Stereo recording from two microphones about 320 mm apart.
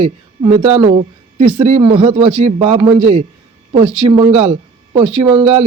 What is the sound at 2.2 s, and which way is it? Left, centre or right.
Speech, right.